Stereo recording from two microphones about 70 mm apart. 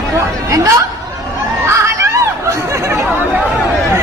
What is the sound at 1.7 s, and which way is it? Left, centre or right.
Snicker, right.